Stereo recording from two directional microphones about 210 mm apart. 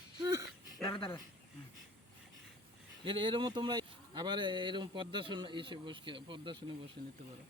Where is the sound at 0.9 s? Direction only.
25° left (ahead or behind).